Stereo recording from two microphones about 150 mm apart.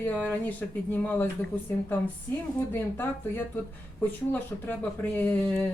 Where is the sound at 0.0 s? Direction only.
10° left (ahead or behind).